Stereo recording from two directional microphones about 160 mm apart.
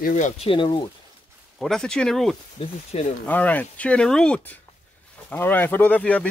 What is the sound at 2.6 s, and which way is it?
Speech, 40° left (ahead or behind).